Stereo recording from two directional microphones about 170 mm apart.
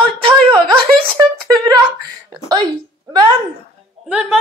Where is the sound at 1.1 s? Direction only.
25° right (ahead or behind).